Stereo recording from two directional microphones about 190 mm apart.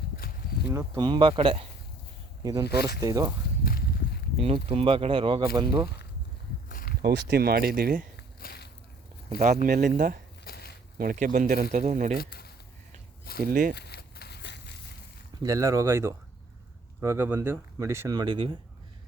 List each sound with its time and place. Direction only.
0.7 s speech: 15° right (ahead or behind)
3.6 s a sound: 50° left (ahead or behind)
4.4 s speech: 30° right (ahead or behind)
6.7 s a sound: 50° left (ahead or behind)
7.0 s speech: 65° right (ahead or behind)
8.1 s walk: 55° left (ahead or behind)
9.4 s speech: 45° right (ahead or behind)
10.4 s a sound: 55° left (ahead or behind)
10.9 s speech: 50° right (ahead or behind)
12.1 s speech: 55° left (ahead or behind)
13.4 s speech: 45° right (ahead or behind)
13.7 s a sound: 60° left (ahead or behind)
15.4 s speech: 15° right (ahead or behind)